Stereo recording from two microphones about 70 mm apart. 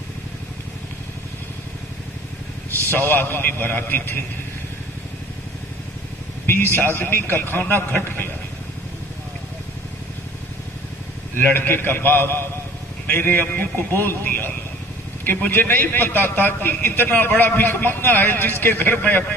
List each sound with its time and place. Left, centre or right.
2.9 s a man's voice: left
6.4 s a man's voice: left
11.4 s a man's voice: left